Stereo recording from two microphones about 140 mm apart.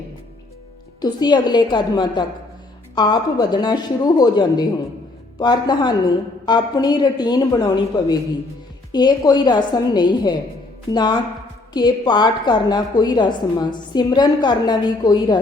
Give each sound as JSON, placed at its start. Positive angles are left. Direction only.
{"t": 1.0, "sound": "a woman's voice", "side_deg": 30}